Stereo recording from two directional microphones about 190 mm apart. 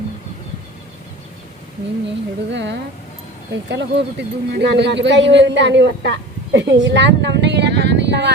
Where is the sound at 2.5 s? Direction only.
65° right (ahead or behind).